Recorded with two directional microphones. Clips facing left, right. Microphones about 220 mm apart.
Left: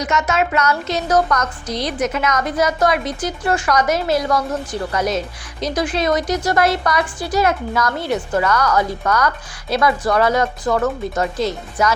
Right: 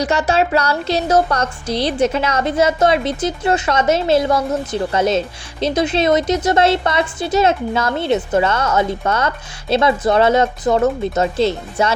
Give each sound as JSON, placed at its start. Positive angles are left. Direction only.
{"t": 0.0, "sound": "a woman's voice", "side_deg": -30}